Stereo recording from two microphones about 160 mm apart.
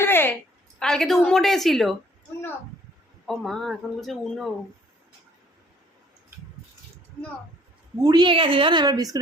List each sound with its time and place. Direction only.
0.0 s a sound: 15° left (ahead or behind)
0.8 s speech: 5° left (ahead or behind)
3.2 s speech: centre (ahead or behind)
8.0 s a woman's voice: 25° right (ahead or behind)